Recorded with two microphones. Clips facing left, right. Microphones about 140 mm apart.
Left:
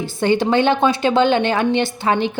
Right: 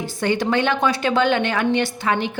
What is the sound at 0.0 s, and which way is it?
A woman's voice, 25° left (ahead or behind).